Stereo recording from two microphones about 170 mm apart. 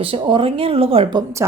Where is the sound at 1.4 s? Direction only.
15° right (ahead or behind).